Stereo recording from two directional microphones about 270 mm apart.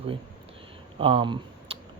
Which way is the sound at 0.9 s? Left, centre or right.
Centre.